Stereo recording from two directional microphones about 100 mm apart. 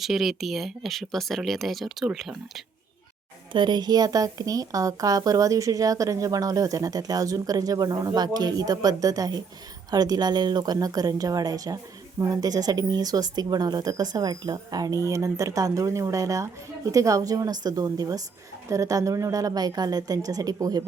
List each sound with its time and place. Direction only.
0.0 s speech: centre (ahead or behind)
3.5 s speech: 50° right (ahead or behind)